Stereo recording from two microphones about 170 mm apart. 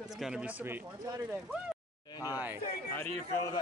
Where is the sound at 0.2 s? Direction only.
5° right (ahead or behind).